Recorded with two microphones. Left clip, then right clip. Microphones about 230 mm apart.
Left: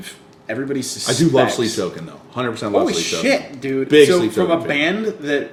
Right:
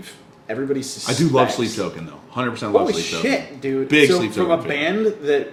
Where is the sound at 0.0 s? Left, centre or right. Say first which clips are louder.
Left 4 dB; left.